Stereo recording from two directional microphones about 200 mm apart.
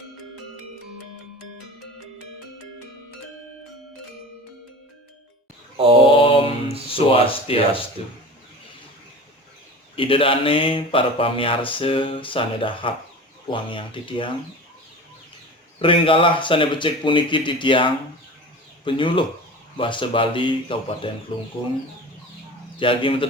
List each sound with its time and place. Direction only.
5.7 s mantra: 30° right (ahead or behind)
6.1 s mantra: 25° left (ahead or behind)
6.9 s speech: 30° left (ahead or behind)
9.9 s speech: 25° left (ahead or behind)
15.8 s speech: 25° left (ahead or behind)
22.8 s speech: 25° left (ahead or behind)